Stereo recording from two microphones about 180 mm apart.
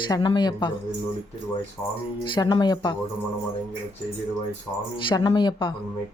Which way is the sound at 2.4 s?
25° left (ahead or behind).